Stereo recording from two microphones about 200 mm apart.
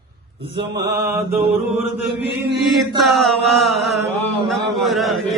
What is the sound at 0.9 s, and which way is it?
Mantra, 15° right (ahead or behind).